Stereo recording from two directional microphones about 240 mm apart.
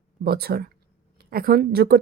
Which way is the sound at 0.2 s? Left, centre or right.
Right.